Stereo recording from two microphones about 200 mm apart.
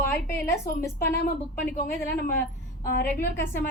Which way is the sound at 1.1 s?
50° left (ahead or behind).